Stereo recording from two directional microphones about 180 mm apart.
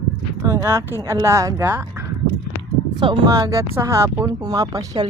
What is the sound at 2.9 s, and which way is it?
Speech, 25° right (ahead or behind).